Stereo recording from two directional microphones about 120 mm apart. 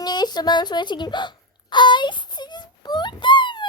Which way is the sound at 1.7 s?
40° left (ahead or behind).